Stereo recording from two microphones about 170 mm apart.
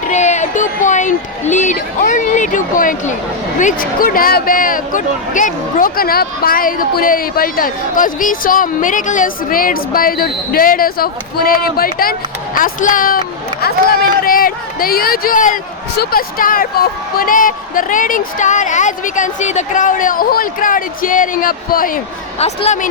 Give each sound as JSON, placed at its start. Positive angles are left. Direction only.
{"t": 0.1, "sound": "speech", "side_deg": 45}
{"t": 22.4, "sound": "a woman's voice", "side_deg": 40}